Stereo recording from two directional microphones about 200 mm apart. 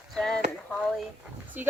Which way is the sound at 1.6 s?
10° right (ahead or behind).